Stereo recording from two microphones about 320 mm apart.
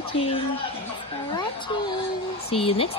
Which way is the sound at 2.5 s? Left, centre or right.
Centre.